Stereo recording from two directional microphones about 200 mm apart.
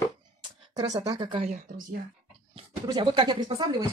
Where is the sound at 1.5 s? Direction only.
40° right (ahead or behind).